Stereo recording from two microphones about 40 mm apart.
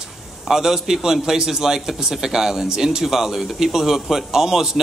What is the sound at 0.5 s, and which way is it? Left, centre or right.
A man's voice, centre.